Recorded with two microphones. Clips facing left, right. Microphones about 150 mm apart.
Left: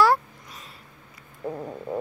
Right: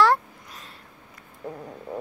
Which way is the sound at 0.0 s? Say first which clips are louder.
Even; 5° left (ahead or behind).